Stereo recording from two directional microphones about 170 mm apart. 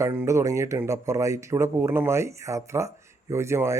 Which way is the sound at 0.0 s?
15° right (ahead or behind).